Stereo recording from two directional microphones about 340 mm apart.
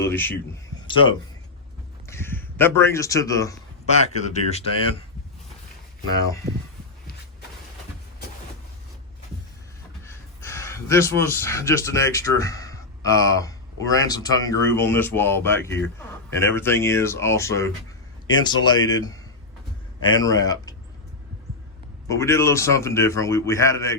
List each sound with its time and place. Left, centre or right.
0.0 s a man's voice: centre
2.0 s speech: centre
6.1 s a man's voice: centre
10.1 s a man's voice: centre
22.1 s a man's voice: centre